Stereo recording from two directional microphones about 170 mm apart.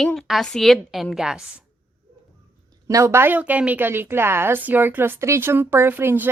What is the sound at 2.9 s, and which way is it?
A woman's voice, 20° right (ahead or behind).